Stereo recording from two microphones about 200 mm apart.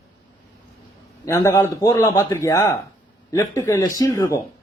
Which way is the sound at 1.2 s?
15° left (ahead or behind).